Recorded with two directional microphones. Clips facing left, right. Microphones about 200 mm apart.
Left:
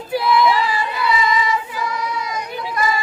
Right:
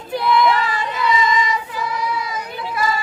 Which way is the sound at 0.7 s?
20° right (ahead or behind).